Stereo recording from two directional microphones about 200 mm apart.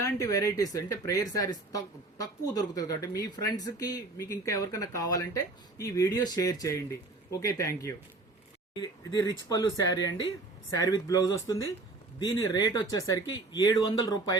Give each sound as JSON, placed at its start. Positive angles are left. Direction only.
{"t": 0.0, "sound": "speech", "side_deg": 15}